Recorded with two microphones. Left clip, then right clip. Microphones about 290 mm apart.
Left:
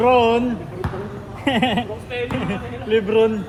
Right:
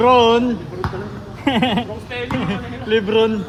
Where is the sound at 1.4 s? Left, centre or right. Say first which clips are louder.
Right 1 dB; right.